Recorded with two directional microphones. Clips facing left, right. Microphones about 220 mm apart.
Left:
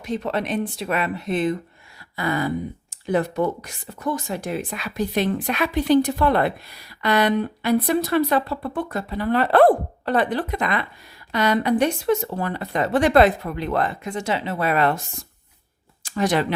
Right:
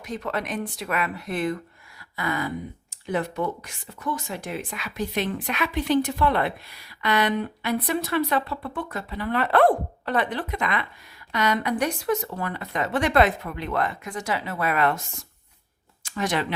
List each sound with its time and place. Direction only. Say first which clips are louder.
0.0 s speech: left 5 dB; 25° left (ahead or behind)
2.1 s speech: left 5 dB; 35° left (ahead or behind)
16.0 s speech: left 5 dB; 35° left (ahead or behind)